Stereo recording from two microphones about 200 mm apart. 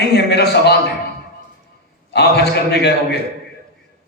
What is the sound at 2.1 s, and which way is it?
A man's voice, 55° left (ahead or behind).